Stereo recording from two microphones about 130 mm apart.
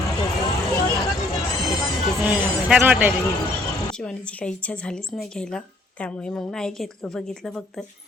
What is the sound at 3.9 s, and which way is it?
A woman's voice, 5° left (ahead or behind).